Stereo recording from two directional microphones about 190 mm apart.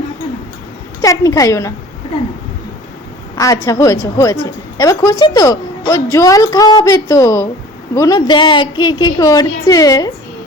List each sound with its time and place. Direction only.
1.0 s a woman's voice: 20° left (ahead or behind)
3.3 s a woman's voice: 15° left (ahead or behind)